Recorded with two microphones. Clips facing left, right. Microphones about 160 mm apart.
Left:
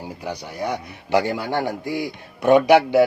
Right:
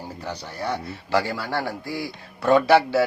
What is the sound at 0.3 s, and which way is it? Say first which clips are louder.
Speech: left 2 dB; 15° left (ahead or behind).